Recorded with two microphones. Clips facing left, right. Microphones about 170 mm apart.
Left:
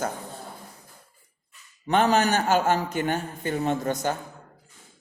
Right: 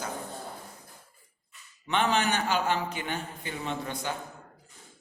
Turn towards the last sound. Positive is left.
turn(degrees=45)  # may be behind; listen again after turning